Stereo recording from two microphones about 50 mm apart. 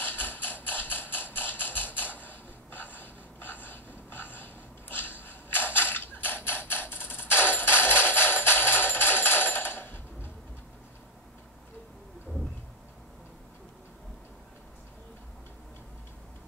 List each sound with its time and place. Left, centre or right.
0.0 s music: left